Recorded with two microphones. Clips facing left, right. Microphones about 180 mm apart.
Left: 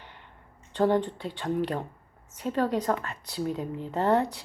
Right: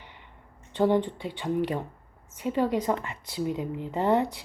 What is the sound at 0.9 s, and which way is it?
A woman's voice, 15° right (ahead or behind).